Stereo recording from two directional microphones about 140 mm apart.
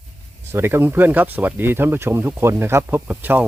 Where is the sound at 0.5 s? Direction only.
15° right (ahead or behind).